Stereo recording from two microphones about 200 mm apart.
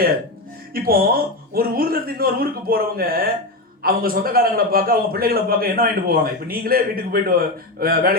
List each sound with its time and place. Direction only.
0.7 s a man's voice: 45° right (ahead or behind)